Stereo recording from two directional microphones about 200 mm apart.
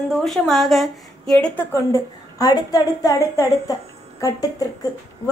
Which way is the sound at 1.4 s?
10° left (ahead or behind).